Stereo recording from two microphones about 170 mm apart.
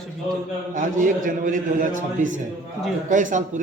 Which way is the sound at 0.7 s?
50° right (ahead or behind).